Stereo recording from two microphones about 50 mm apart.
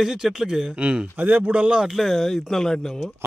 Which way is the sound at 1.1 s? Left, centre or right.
Right.